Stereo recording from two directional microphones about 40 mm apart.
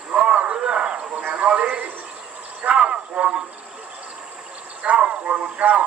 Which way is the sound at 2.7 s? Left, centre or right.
Right.